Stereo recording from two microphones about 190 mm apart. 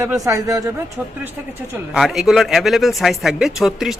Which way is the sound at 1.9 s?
Centre (ahead or behind).